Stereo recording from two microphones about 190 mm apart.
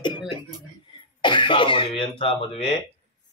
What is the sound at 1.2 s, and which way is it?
Speech, 25° left (ahead or behind).